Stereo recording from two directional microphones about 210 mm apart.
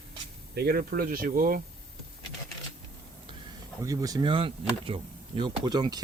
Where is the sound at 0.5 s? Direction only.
45° right (ahead or behind).